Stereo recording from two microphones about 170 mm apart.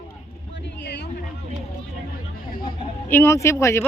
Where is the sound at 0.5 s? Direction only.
85° left.